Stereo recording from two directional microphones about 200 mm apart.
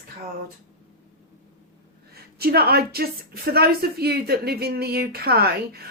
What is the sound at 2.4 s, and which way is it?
Speech, 50° right (ahead or behind).